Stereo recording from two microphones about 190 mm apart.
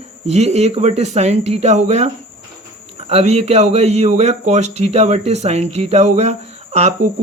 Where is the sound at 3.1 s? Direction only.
35° right (ahead or behind).